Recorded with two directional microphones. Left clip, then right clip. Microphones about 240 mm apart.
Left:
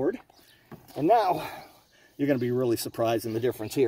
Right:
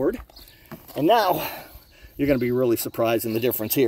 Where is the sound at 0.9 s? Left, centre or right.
Right.